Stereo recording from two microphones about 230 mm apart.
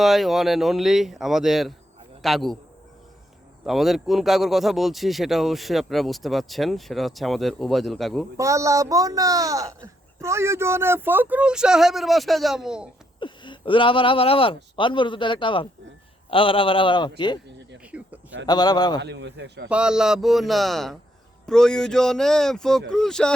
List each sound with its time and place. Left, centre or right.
0.0 s speech: centre
3.7 s speech: centre
8.4 s speech: centre
13.1 s a man's voice: left
17.9 s a sound: centre
18.4 s a man's voice: centre
19.0 s a man's voice: right
19.6 s speech: centre